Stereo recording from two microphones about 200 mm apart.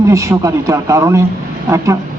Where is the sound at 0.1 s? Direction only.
15° right (ahead or behind).